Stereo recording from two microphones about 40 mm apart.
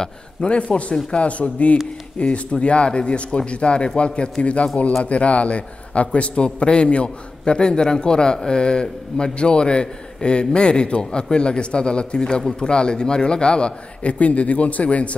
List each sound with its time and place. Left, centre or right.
0.5 s a man's voice: left